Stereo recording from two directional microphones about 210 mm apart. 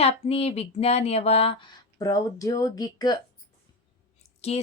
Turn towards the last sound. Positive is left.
turn(degrees=30)  # may be behind; listen again after turning